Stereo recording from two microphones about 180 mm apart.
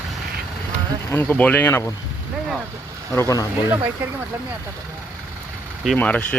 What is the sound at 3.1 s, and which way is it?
Speech, 15° left (ahead or behind).